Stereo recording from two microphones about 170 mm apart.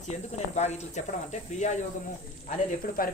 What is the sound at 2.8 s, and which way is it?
Speech, 55° left (ahead or behind).